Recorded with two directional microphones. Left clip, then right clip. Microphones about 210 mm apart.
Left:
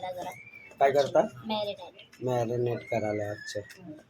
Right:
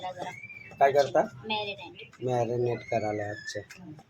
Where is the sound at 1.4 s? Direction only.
25° left (ahead or behind).